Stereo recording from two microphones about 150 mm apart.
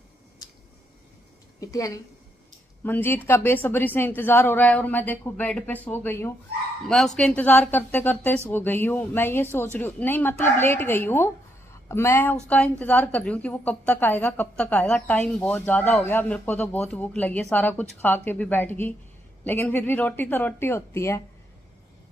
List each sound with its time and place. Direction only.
1.6 s a woman's voice: 20° left (ahead or behind)